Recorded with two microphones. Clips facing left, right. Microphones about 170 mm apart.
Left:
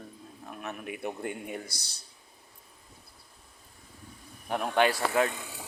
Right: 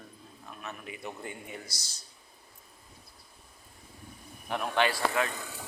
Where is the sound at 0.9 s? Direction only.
55° left (ahead or behind).